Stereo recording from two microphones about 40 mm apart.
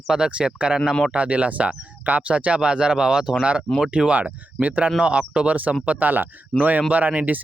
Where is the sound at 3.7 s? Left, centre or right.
Centre.